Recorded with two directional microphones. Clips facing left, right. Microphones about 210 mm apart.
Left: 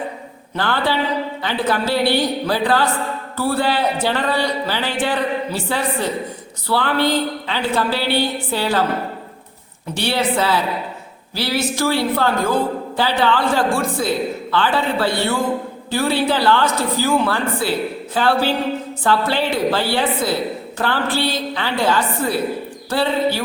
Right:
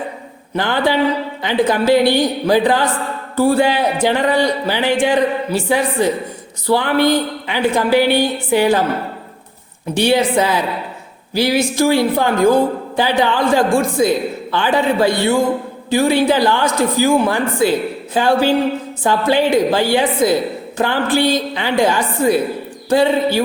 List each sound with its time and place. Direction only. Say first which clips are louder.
0.5 s a woman's voice: right 4 dB; 15° right (ahead or behind)
9.9 s a woman's voice: right 6 dB; 15° right (ahead or behind)